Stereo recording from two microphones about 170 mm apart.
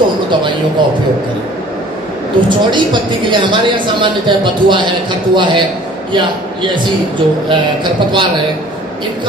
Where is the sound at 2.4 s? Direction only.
30° right (ahead or behind).